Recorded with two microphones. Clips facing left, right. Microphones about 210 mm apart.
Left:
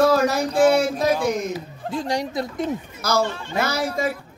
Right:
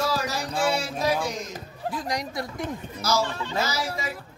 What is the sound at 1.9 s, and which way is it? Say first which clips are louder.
Speech: left 5 dB; 30° left (ahead or behind).